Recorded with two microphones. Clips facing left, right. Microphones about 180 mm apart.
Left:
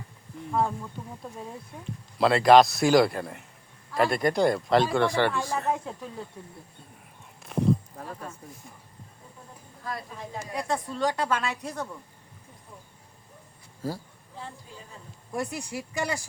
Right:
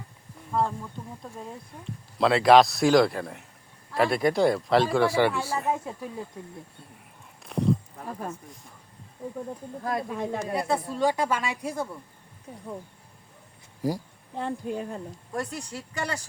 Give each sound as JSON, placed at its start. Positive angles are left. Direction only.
{"t": 2.1, "sound": "speech", "side_deg": 0}
{"t": 7.4, "sound": "a sound", "side_deg": 0}
{"t": 9.8, "sound": "speech", "side_deg": -55}
{"t": 10.5, "sound": "a woman's voice", "side_deg": -5}
{"t": 13.8, "sound": "a woman's voice", "side_deg": -15}
{"t": 14.3, "sound": "speech", "side_deg": -65}
{"t": 15.3, "sound": "speech", "side_deg": 10}